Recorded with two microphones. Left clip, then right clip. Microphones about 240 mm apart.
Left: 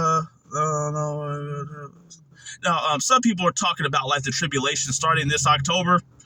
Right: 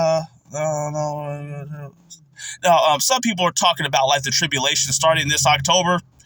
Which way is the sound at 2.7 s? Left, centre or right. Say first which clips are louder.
Right 8 dB; right.